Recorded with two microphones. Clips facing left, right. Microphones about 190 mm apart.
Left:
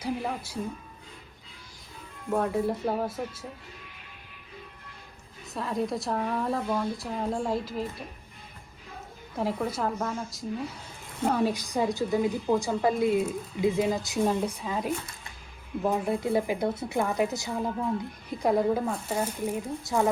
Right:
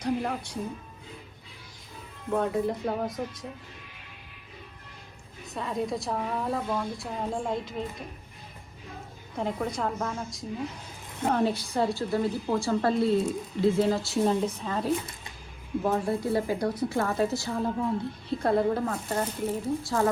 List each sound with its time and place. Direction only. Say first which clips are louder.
0.0 s a woman's voice: right 2 dB; 5° left (ahead or behind)
2.3 s a woman's voice: even; centre (ahead or behind)
5.5 s a woman's voice: left 1 dB; centre (ahead or behind)
9.3 s a woman's voice: left 1 dB; 5° left (ahead or behind)